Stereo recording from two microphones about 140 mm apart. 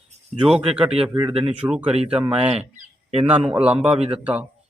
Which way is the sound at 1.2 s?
45° right (ahead or behind).